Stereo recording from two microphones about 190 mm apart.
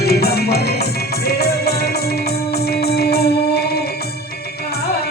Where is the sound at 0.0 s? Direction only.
55° left (ahead or behind).